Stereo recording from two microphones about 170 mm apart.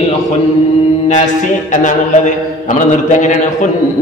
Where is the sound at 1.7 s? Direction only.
45° left (ahead or behind).